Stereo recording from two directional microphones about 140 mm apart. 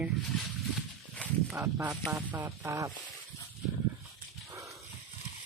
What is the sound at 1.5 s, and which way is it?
Speech, 20° right (ahead or behind).